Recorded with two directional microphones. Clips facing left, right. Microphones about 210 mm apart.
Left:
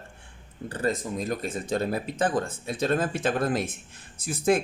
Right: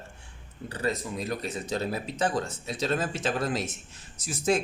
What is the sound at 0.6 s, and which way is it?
Speech, 50° left (ahead or behind).